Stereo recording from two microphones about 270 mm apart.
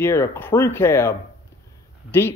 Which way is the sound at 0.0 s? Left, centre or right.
Centre.